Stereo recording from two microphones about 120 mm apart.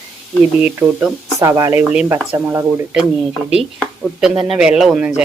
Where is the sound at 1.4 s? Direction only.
25° right (ahead or behind).